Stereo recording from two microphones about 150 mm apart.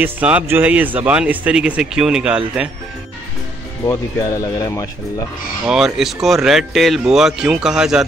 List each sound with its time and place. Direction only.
0.0 s speech: 10° right (ahead or behind)
3.8 s speech: 20° left (ahead or behind)
5.7 s speech: 5° right (ahead or behind)